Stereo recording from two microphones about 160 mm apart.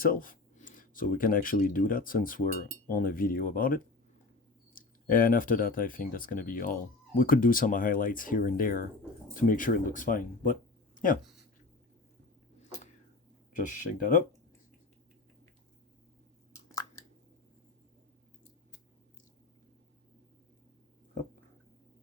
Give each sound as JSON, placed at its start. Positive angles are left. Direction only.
{"t": 0.0, "sound": "speech", "side_deg": 60}
{"t": 13.7, "sound": "speech", "side_deg": 55}